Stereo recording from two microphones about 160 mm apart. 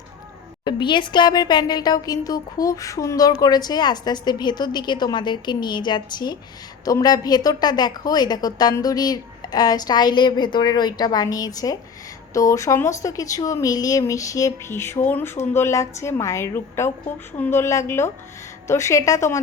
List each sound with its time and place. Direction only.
0.6 s a woman's voice: 30° left (ahead or behind)